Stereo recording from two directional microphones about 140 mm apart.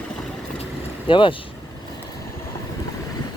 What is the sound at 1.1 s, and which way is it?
Speech, 35° left (ahead or behind).